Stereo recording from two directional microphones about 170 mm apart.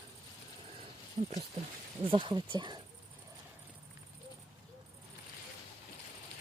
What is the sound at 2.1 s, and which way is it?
Speech, 30° right (ahead or behind).